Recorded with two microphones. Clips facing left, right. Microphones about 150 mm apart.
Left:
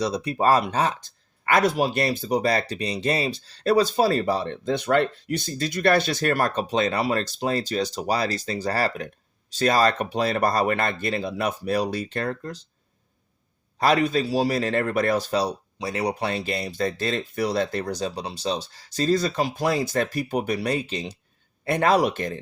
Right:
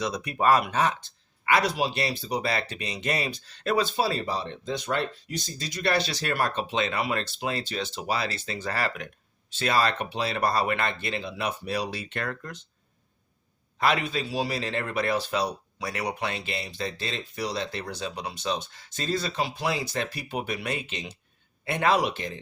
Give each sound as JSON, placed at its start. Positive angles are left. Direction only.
{"t": 0.0, "sound": "speech", "side_deg": 30}
{"t": 1.5, "sound": "speech", "side_deg": 45}
{"t": 13.7, "sound": "speech", "side_deg": 40}